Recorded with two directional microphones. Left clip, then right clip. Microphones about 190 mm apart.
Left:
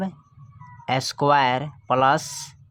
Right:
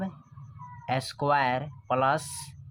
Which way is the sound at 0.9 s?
35° left (ahead or behind).